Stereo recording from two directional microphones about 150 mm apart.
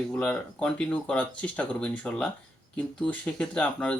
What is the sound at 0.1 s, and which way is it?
Speech, 5° left (ahead or behind).